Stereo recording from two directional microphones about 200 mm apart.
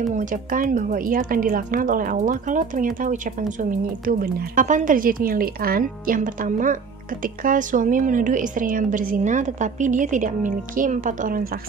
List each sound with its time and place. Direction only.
0.0 s a woman's voice: 40° right (ahead or behind)